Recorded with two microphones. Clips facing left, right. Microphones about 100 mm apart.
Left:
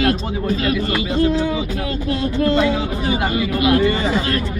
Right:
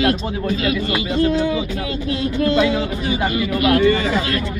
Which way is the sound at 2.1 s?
35° left (ahead or behind).